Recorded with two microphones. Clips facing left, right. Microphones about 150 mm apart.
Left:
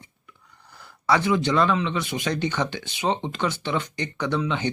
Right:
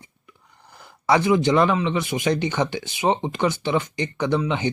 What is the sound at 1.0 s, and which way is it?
Speech, 15° right (ahead or behind).